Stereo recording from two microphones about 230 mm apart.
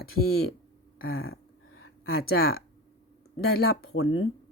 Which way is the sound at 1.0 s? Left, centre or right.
Left.